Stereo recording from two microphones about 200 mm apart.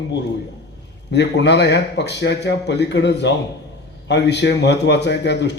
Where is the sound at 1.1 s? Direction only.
60° left (ahead or behind).